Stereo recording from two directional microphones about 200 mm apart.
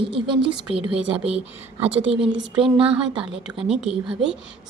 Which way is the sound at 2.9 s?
5° right (ahead or behind).